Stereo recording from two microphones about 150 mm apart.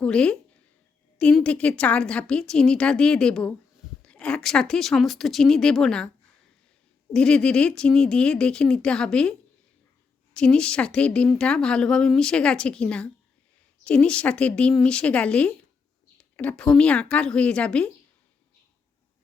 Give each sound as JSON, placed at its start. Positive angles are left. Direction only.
{"t": 0.0, "sound": "a woman's voice", "side_deg": 5}
{"t": 7.1, "sound": "a woman's voice", "side_deg": 5}
{"t": 10.3, "sound": "a woman's voice", "side_deg": 5}